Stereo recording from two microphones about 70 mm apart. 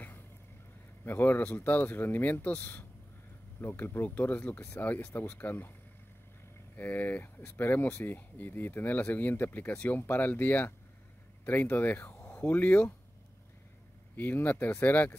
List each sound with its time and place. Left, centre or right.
1.0 s speech: left
6.8 s speech: left
12.1 s a sound: left
12.4 s speech: left
14.1 s speech: left